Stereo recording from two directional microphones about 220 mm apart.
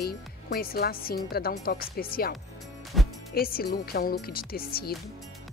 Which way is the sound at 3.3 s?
45° left (ahead or behind).